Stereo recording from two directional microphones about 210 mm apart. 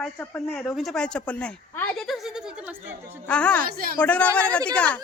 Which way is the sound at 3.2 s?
5° left (ahead or behind).